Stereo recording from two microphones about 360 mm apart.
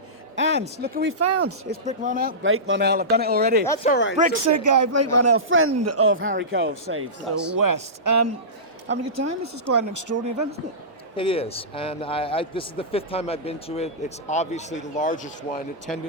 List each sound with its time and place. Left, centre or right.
0.3 s a man's voice: right
1.2 s a man's voice: right
1.8 s a man's voice: right
3.8 s speech: left
4.4 s a man's voice: right
7.5 s speech: right
11.2 s a man's voice: centre
15.9 s speech: centre